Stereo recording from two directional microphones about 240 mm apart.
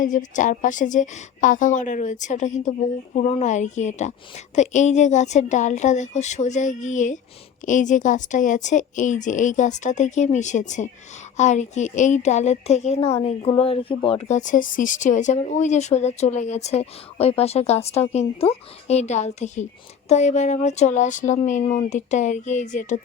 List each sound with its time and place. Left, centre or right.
0.0 s a woman's voice: left